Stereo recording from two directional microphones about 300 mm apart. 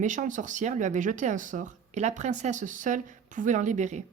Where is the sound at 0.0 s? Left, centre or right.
Right.